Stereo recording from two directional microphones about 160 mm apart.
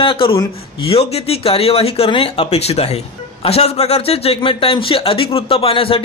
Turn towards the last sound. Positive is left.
turn(degrees=35)  # may be behind; listen again after turning